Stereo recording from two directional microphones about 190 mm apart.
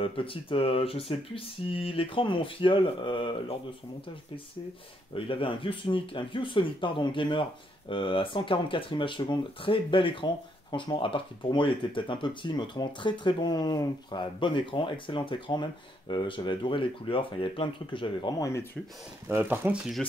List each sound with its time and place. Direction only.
0.0 s speech: 30° left (ahead or behind)
5.1 s speech: 25° left (ahead or behind)
19.2 s speech: 10° right (ahead or behind)